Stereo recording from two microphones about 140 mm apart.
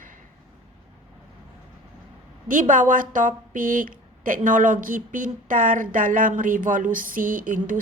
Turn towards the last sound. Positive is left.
turn(degrees=-70)  # may be behind; listen again after turning